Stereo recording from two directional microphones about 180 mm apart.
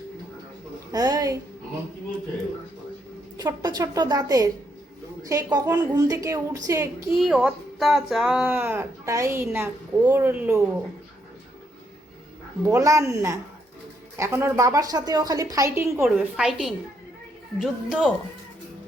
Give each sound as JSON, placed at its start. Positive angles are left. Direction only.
{"t": 0.9, "sound": "a woman's voice", "side_deg": -20}
{"t": 3.3, "sound": "a woman's voice", "side_deg": -20}
{"t": 7.2, "sound": "speech", "side_deg": -5}
{"t": 12.6, "sound": "speech", "side_deg": -15}
{"t": 16.0, "sound": "a woman's voice", "side_deg": -5}